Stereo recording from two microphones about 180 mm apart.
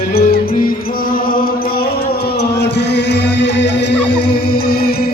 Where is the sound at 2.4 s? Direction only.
70° left (ahead or behind).